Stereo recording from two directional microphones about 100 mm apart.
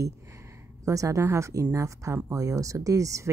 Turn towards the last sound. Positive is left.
turn(degrees=-30)  # may be behind; listen again after turning